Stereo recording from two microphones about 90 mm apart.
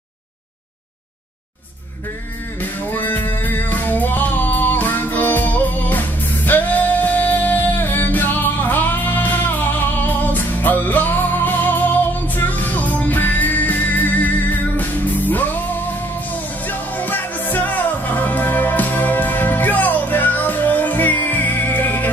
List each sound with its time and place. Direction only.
2.6 s music: 20° left (ahead or behind)